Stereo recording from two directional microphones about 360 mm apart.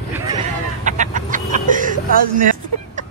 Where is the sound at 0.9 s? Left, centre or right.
Right.